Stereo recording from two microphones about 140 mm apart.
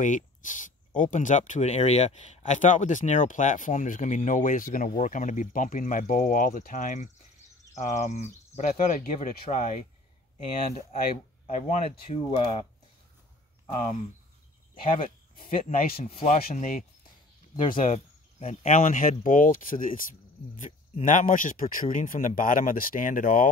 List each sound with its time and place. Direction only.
0.0 s speech: 65° left (ahead or behind)
8.7 s speech: 85° left; by 9.8 s 60° left (ahead or behind)
11.4 s speech: 60° left (ahead or behind)
11.9 s speech: 40° left (ahead or behind)
15.3 s speech: 90° left
17.8 s speech: 60° left (ahead or behind)
21.0 s speech: 65° left (ahead or behind)